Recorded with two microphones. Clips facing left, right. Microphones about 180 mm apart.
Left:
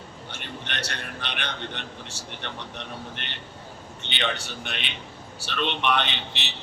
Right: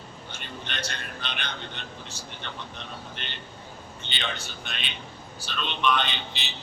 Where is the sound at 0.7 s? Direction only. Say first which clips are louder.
Left 1 dB; 75° left (ahead or behind).